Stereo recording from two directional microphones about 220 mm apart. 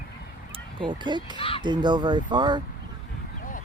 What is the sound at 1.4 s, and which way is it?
Speech, 25° left (ahead or behind).